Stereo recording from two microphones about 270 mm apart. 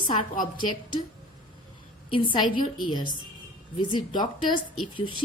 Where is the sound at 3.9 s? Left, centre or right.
Centre.